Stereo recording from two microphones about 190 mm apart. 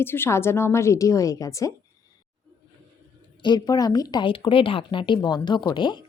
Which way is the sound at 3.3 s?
25° left (ahead or behind).